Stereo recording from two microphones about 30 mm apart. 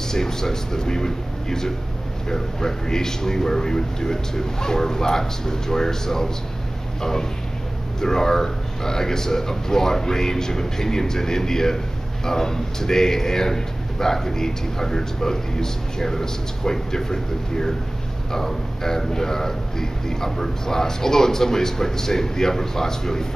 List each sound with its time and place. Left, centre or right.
0.1 s a man's voice: centre